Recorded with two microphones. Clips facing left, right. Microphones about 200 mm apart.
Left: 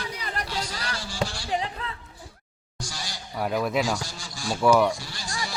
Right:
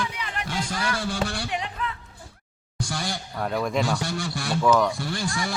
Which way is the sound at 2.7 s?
55° right (ahead or behind).